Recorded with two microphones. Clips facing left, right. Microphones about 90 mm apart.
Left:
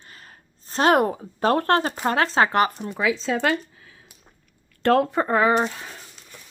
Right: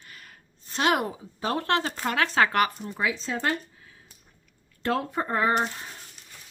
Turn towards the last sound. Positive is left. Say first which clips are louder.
# left 4 dB
turn(degrees=90)